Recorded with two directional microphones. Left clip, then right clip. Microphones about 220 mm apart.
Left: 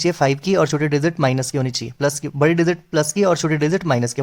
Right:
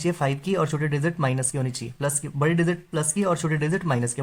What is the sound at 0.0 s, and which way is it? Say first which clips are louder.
Speech: left 8 dB; 45° left (ahead or behind).